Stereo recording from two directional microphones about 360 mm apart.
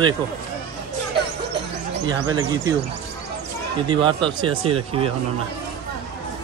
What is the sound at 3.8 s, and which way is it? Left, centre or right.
Speech, centre.